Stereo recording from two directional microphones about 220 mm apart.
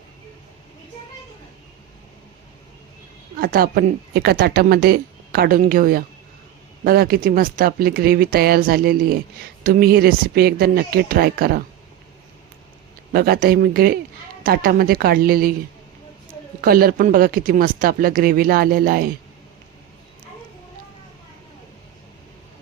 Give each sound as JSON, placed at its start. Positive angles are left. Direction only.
{"t": 3.4, "sound": "a woman's voice", "side_deg": -40}
{"t": 13.1, "sound": "a woman's voice", "side_deg": -40}
{"t": 16.6, "sound": "a woman's voice", "side_deg": -40}